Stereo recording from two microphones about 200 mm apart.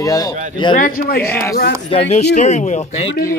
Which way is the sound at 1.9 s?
30° left (ahead or behind).